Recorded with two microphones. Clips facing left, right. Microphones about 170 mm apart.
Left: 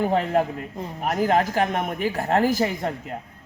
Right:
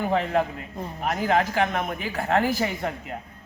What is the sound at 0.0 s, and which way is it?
A man's voice, 40° left (ahead or behind).